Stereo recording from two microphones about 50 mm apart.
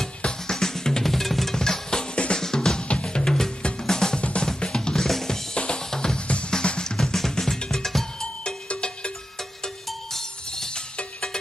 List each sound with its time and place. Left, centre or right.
0.2 s music: centre
2.4 s drum kit: centre
3.8 s music: centre
4.2 s drum: left
5.6 s drum kit: centre
7.0 s music: centre
8.6 s music: left
9.8 s music: centre